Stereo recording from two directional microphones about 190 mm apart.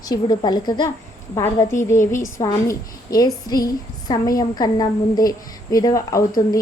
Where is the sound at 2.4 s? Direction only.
20° left (ahead or behind).